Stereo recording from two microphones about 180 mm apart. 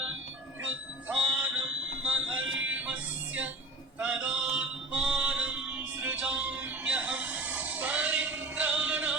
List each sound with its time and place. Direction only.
1.0 s music: 5° right (ahead or behind)
2.2 s fire alarm: 90° right
2.6 s music: 10° right (ahead or behind)
4.0 s a sound: 5° right (ahead or behind)